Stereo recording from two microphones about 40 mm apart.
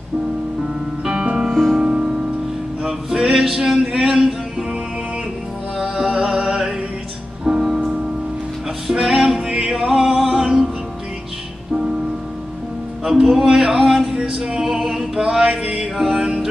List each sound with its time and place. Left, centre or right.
1.2 s music: centre
2.8 s male singing: centre
3.9 s speech: centre
5.8 s music: centre
9.0 s music: centre
9.5 s music: right
13.1 s music: centre
15.1 s mantra: centre
15.8 s music: centre